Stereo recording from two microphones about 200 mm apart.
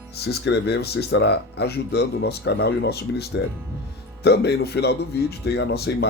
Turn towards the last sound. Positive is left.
turn(degrees=55)  # may be behind; listen again after turning